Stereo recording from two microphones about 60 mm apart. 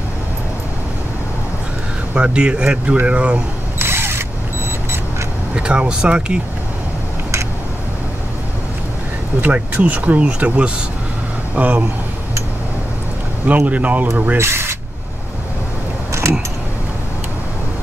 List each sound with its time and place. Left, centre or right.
2.1 s speech: centre
3.7 s drill: right
5.6 s speech: centre
9.4 s speech: right
13.5 s speech: right
14.3 s speech: right
16.1 s mechanisms: right